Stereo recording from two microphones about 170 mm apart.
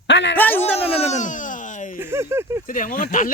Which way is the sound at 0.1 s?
90° left.